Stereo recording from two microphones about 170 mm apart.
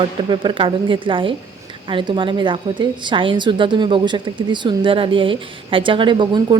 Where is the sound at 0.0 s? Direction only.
30° right (ahead or behind).